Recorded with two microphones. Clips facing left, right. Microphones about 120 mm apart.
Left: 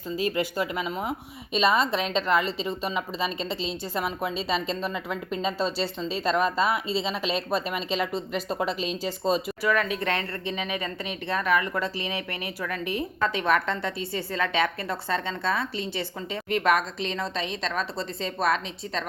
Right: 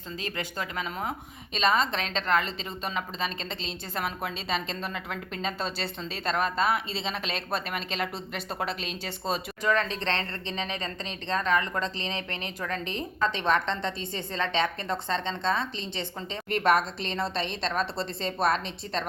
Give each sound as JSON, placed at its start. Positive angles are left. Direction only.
{"t": 0.2, "sound": "a woman's voice", "side_deg": 10}
{"t": 9.9, "sound": "a woman's voice", "side_deg": 10}
{"t": 13.4, "sound": "a woman's voice", "side_deg": -25}
{"t": 16.5, "sound": "a woman's voice", "side_deg": -35}
{"t": 17.7, "sound": "a woman's voice", "side_deg": 0}